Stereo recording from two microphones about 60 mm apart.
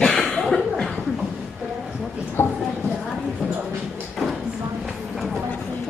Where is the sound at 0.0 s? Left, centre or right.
Centre.